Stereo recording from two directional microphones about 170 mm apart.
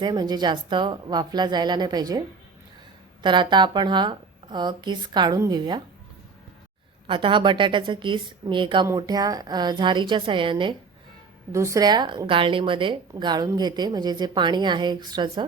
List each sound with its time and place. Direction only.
0.0 s a woman's voice: 25° right (ahead or behind)
3.2 s a woman's voice: 25° right (ahead or behind)
7.1 s a woman's voice: 30° right (ahead or behind)
11.5 s a woman's voice: 20° right (ahead or behind)